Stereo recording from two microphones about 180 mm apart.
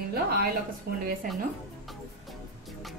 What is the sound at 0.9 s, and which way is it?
Speech, 60° right (ahead or behind).